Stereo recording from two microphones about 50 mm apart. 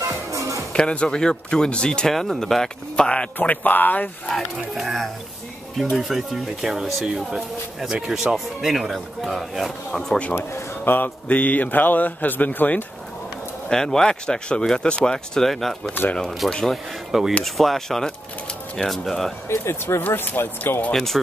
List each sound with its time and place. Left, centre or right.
0.3 s music: right
0.7 s speech: centre
3.0 s speech: left
3.3 s a man's voice: left
4.6 s speech: centre
10.8 s a man's voice: left
13.7 s speech: centre
17.1 s speech: centre
17.6 s speech: centre
19.5 s speech: left
20.1 s speech: left
20.9 s speech: centre